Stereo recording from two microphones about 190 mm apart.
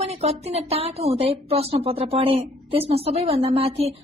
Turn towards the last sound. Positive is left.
turn(degrees=-30)  # may be behind; listen again after turning